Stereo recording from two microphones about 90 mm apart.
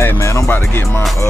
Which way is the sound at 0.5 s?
25° left (ahead or behind).